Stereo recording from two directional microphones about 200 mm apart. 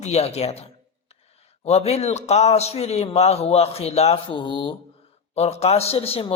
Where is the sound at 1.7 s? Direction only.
30° left (ahead or behind).